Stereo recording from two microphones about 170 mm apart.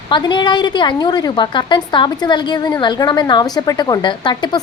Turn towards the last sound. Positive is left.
turn(degrees=25)  # may be behind; listen again after turning